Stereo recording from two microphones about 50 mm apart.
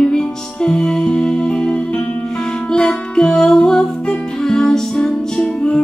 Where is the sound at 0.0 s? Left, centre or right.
Centre.